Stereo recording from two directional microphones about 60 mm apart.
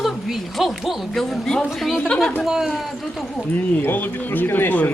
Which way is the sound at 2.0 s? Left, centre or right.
Centre.